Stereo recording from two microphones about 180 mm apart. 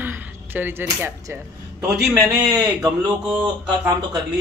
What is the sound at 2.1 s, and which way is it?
Speech, 20° right (ahead or behind).